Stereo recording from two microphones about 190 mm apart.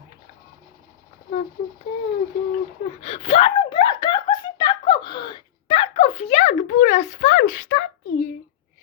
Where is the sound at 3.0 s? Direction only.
35° left (ahead or behind).